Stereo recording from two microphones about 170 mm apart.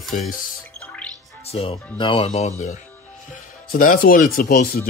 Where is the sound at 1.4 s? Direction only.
35° left (ahead or behind).